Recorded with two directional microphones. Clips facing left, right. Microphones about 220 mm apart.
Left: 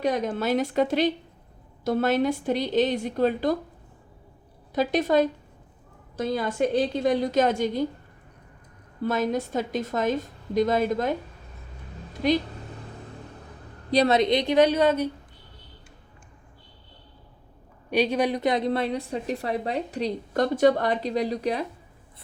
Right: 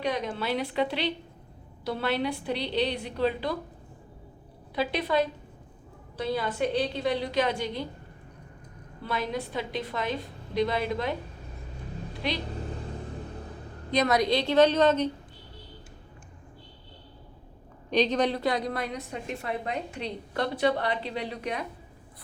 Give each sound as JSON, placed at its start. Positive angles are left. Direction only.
{"t": 0.0, "sound": "a woman's voice", "side_deg": 45}
{"t": 4.7, "sound": "a woman's voice", "side_deg": 45}
{"t": 9.0, "sound": "a woman's voice", "side_deg": 45}
{"t": 12.2, "sound": "a woman's voice", "side_deg": 45}
{"t": 13.9, "sound": "a woman's voice", "side_deg": 30}
{"t": 17.9, "sound": "a woman's voice", "side_deg": 10}